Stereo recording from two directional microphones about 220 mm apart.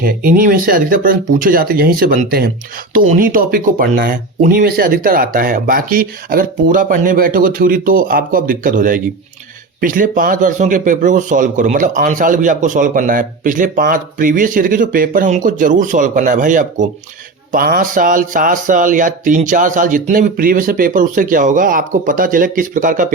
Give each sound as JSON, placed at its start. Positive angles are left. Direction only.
{"t": 0.0, "sound": "speech", "side_deg": -40}